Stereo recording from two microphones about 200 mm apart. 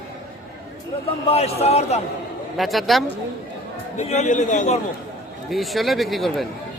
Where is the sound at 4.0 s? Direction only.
35° left (ahead or behind).